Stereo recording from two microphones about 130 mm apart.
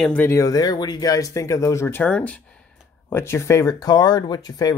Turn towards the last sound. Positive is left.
turn(degrees=30)  # may be behind; listen again after turning